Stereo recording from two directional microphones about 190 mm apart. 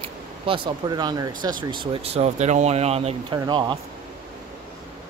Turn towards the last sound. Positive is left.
turn(degrees=-25)  # may be behind; listen again after turning